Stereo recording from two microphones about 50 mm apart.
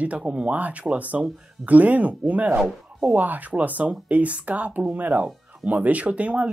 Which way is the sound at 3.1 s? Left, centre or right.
Right.